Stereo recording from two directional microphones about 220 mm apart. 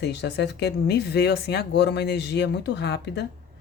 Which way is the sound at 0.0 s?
50° left (ahead or behind).